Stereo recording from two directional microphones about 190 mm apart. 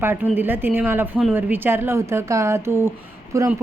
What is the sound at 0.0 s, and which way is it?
A woman's voice, 10° right (ahead or behind).